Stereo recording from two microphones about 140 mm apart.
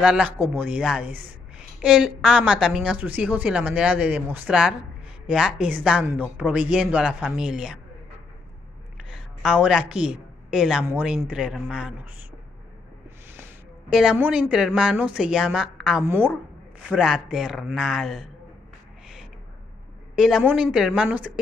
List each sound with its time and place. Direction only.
0.0 s a woman's voice: 5° right (ahead or behind)
8.9 s a sound: 5° right (ahead or behind)
10.9 s a woman's voice: 10° right (ahead or behind)
13.8 s a woman's voice: 5° right (ahead or behind)
20.2 s a woman's voice: 5° right (ahead or behind)